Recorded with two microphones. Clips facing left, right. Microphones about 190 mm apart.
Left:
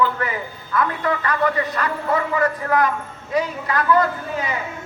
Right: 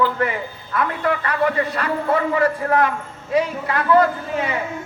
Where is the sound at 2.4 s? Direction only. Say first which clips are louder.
Right 1 dB; 30° right (ahead or behind).